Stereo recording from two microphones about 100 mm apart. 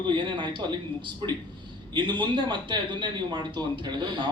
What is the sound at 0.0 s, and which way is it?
Speech, 50° right (ahead or behind).